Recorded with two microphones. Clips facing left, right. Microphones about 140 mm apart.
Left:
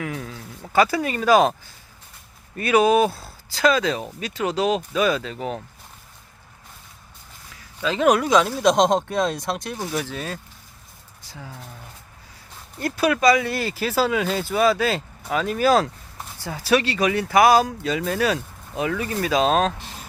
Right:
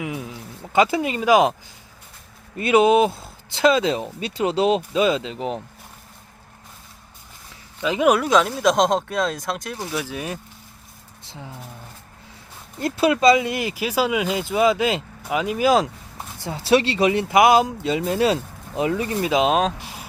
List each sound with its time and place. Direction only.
0.0 s a sound: 15° right (ahead or behind)
0.7 s speech: 20° right (ahead or behind)
2.6 s speech: 25° right (ahead or behind)
7.5 s speech: 15° right (ahead or behind)
12.8 s speech: 25° right (ahead or behind)